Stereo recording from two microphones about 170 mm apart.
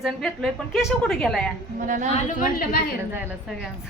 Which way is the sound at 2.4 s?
55° left (ahead or behind).